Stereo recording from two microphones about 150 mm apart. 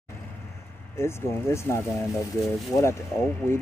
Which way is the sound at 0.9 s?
15° left (ahead or behind).